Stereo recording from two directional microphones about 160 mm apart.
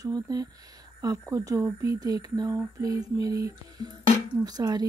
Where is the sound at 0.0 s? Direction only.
25° right (ahead or behind).